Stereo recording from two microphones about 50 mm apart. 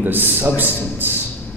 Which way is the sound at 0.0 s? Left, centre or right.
Right.